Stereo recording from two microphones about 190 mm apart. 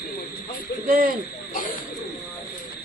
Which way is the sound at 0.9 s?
50° right (ahead or behind).